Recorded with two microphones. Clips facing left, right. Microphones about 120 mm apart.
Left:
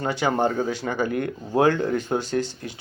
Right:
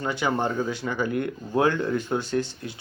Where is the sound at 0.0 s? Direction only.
40° left (ahead or behind).